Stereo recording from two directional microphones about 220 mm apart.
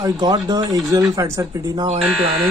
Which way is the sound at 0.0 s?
20° right (ahead or behind).